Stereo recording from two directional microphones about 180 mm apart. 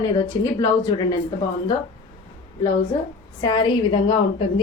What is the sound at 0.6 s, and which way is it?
Speech, 25° left (ahead or behind).